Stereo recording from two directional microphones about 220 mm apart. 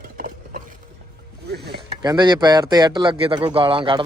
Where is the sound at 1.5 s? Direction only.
45° right (ahead or behind).